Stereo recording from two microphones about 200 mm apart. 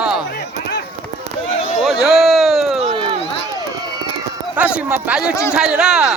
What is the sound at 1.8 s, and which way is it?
Speech, centre (ahead or behind).